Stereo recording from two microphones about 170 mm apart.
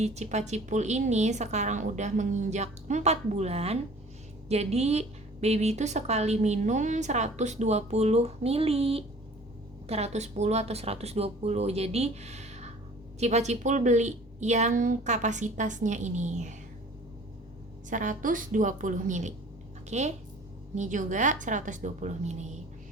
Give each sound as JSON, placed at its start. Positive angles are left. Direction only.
{"t": 0.0, "sound": "a woman's voice", "side_deg": -40}
{"t": 17.8, "sound": "a woman's voice", "side_deg": -50}